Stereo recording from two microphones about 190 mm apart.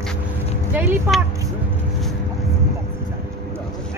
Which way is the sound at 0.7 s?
10° right (ahead or behind).